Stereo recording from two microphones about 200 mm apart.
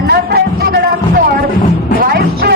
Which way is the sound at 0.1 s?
50° right (ahead or behind).